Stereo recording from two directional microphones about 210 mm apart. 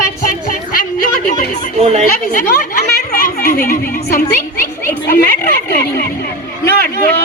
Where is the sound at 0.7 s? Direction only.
40° left (ahead or behind).